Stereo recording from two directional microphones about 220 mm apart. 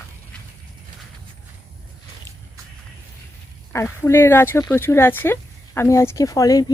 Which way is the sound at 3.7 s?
10° left (ahead or behind).